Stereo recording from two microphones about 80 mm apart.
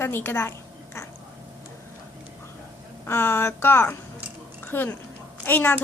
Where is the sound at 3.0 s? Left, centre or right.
Left.